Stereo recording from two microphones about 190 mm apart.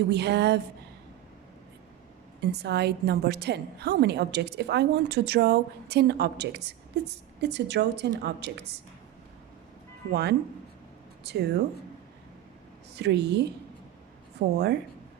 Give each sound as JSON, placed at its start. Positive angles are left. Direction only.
{"t": 0.1, "sound": "a woman's voice", "side_deg": -60}
{"t": 2.4, "sound": "a woman's voice", "side_deg": -60}
{"t": 10.1, "sound": "a woman's voice", "side_deg": -60}
{"t": 13.0, "sound": "a woman's voice", "side_deg": -60}